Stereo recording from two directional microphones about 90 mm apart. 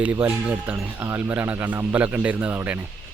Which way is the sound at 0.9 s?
30° right (ahead or behind).